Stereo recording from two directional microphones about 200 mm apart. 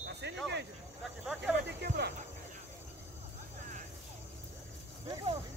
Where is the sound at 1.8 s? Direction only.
55° right (ahead or behind).